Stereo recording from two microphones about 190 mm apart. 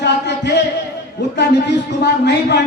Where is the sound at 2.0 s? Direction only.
60° left (ahead or behind).